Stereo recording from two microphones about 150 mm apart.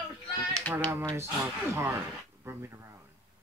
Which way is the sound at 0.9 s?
20° right (ahead or behind).